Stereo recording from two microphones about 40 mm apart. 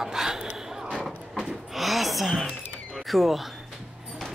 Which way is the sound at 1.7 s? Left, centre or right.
Centre.